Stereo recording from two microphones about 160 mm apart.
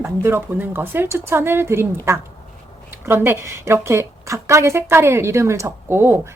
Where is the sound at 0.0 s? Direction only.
15° right (ahead or behind).